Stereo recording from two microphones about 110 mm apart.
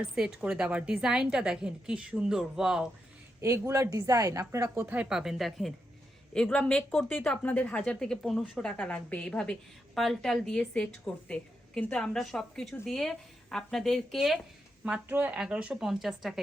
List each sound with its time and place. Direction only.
0.1 s a woman's voice: 5° right (ahead or behind)
3.7 s a woman's voice: 30° right (ahead or behind); by 8.7 s centre (ahead or behind)
8.7 s a woman's voice: 15° left (ahead or behind); by 14.4 s 5° right (ahead or behind)
14.8 s a woman's voice: 15° right (ahead or behind)